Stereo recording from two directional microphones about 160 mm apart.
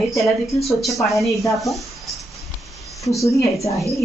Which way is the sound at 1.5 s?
Centre (ahead or behind).